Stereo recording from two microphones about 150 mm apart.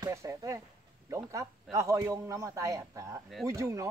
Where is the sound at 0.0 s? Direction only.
20° right (ahead or behind).